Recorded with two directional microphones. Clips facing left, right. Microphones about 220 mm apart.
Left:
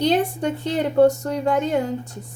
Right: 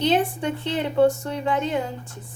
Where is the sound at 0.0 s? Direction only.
40° left (ahead or behind).